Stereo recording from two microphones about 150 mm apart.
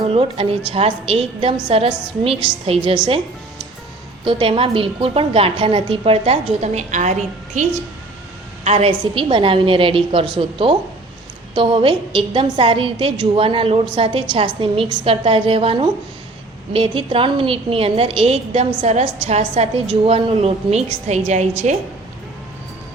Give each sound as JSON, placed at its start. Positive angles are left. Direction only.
{"t": 0.1, "sound": "a woman's voice", "side_deg": -40}
{"t": 4.2, "sound": "a woman's voice", "side_deg": -35}
{"t": 8.6, "sound": "a woman's voice", "side_deg": -40}